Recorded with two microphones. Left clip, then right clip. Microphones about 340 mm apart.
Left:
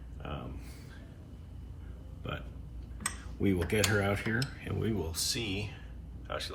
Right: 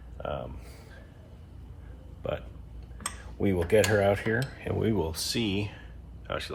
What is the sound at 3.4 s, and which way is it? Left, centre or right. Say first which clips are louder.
Cutlery: right 6 dB; right.